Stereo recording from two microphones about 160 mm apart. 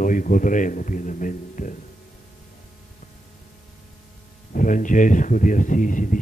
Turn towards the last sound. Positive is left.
turn(degrees=55)  # may be behind; listen again after turning